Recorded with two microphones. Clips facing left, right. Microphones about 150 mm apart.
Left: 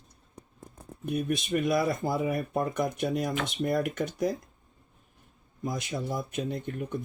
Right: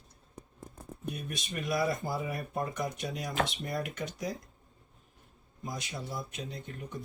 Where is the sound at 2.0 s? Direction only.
60° left (ahead or behind).